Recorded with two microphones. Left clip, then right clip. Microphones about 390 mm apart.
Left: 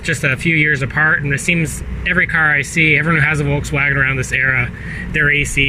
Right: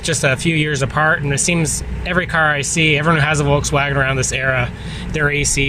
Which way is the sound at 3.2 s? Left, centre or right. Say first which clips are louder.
Even; centre.